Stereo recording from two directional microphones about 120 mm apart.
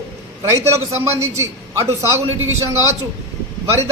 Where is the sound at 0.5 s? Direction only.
25° right (ahead or behind).